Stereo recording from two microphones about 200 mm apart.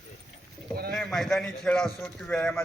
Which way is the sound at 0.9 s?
Centre (ahead or behind).